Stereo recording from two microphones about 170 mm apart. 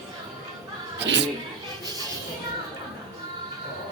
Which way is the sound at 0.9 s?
90° right.